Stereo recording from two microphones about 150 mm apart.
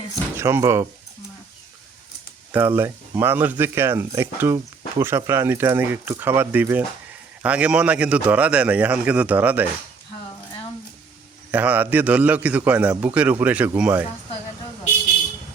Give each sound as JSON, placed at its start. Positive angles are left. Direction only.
{"t": 0.3, "sound": "speech", "side_deg": -15}
{"t": 2.5, "sound": "speech", "side_deg": -15}
{"t": 11.5, "sound": "speech", "side_deg": -10}